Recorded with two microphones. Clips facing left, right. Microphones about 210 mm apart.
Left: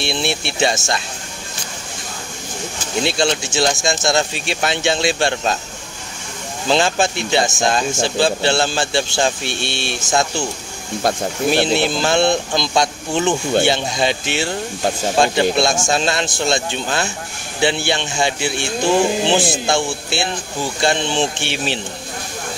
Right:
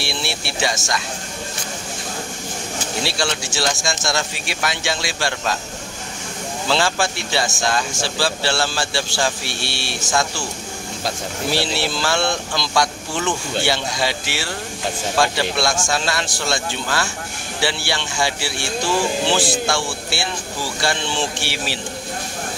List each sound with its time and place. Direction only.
0.0 s speech: 20° left (ahead or behind)
3.0 s speech: 20° left (ahead or behind)
6.7 s speech: 20° left (ahead or behind)
11.5 s speech: 20° left (ahead or behind)